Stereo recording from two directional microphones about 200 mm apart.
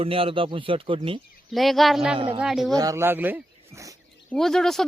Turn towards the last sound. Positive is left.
turn(degrees=0)  # may be behind; listen again after turning